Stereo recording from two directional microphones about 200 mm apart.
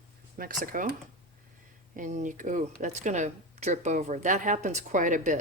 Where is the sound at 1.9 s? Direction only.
40° right (ahead or behind).